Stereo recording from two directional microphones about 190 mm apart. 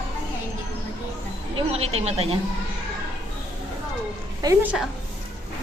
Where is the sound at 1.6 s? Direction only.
35° right (ahead or behind).